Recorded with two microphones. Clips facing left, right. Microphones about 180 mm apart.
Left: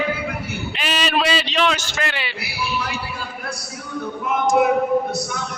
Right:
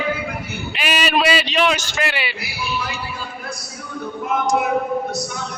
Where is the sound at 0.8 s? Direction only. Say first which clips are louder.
Right 2 dB; 10° right (ahead or behind).